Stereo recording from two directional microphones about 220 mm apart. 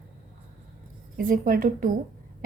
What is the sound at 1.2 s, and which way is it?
Speech, 40° right (ahead or behind).